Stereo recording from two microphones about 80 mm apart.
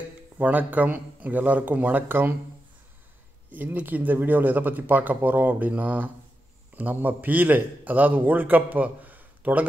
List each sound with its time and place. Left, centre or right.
0.4 s a man's voice: right
3.5 s a man's voice: right